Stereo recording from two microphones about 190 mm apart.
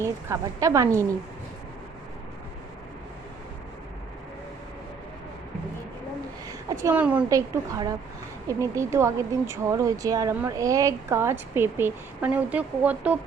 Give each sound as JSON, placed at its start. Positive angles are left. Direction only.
{"t": 0.0, "sound": "speech", "side_deg": -15}
{"t": 6.5, "sound": "speech", "side_deg": -15}